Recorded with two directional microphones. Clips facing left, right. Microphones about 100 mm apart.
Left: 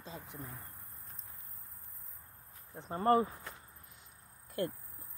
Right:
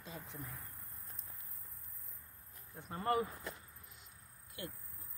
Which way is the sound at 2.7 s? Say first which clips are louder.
Left 7 dB; 30° left (ahead or behind).